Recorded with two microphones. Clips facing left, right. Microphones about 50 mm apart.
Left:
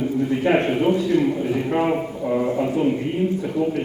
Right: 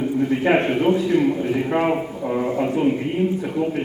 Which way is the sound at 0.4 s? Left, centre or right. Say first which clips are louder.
Even; centre.